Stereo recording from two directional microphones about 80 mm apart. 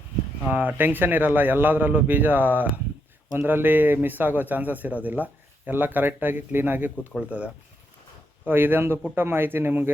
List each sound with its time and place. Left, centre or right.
0.4 s a man's voice: centre